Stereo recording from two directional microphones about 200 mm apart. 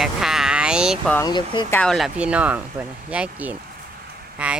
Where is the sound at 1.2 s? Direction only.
20° left (ahead or behind).